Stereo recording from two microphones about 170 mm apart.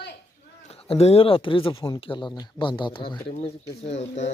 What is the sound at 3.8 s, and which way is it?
Speech, 40° left (ahead or behind).